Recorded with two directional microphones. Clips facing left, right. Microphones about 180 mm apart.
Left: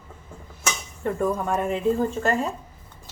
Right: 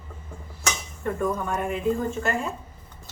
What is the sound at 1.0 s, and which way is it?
Speech, 25° left (ahead or behind).